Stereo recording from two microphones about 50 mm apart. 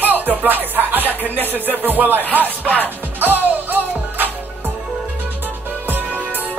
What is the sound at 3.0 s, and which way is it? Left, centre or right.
Music, right.